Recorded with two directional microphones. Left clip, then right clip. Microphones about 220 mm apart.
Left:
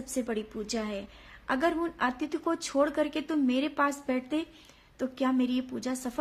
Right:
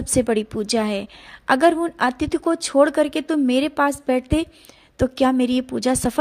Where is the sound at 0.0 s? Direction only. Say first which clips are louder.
Right 13 dB; 40° right (ahead or behind).